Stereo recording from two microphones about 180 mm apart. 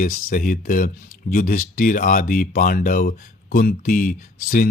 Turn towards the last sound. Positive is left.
turn(degrees=50)  # may be behind; listen again after turning